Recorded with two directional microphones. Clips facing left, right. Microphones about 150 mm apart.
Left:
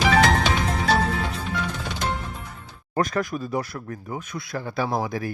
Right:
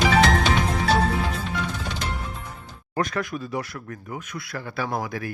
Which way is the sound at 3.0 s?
40° left (ahead or behind).